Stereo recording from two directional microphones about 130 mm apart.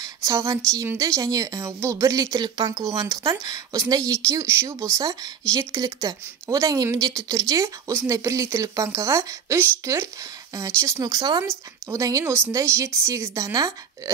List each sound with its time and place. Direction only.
0.0 s a woman's voice: 25° right (ahead or behind)